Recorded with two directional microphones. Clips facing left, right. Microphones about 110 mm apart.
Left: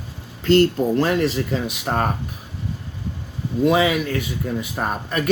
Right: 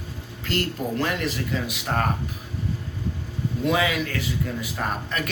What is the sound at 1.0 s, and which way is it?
Speech, 25° left (ahead or behind).